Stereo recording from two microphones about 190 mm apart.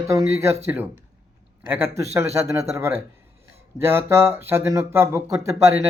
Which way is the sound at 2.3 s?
15° right (ahead or behind).